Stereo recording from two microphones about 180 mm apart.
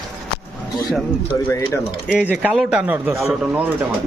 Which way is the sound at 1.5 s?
15° left (ahead or behind).